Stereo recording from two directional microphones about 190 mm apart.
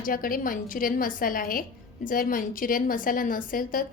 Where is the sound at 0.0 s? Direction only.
50° left (ahead or behind).